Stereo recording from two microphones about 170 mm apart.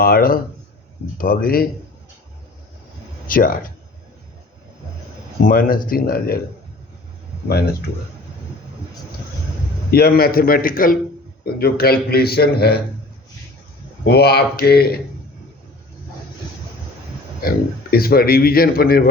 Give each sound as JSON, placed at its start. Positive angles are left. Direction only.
{"t": 0.0, "sound": "a man's voice", "side_deg": 60}
{"t": 3.2, "sound": "a man's voice", "side_deg": 55}
{"t": 5.5, "sound": "a man's voice", "side_deg": 55}
{"t": 9.9, "sound": "a man's voice", "side_deg": 65}
{"t": 14.0, "sound": "speech", "side_deg": 70}
{"t": 17.4, "sound": "a man's voice", "side_deg": 60}